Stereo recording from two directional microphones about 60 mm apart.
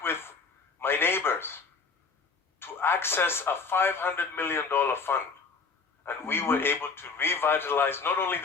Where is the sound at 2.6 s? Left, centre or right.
Left.